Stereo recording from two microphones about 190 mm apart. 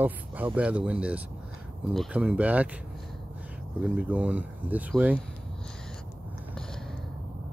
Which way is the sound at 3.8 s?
10° right (ahead or behind).